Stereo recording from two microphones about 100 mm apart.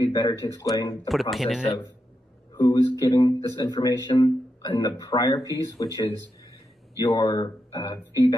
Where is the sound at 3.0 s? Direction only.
40° left (ahead or behind).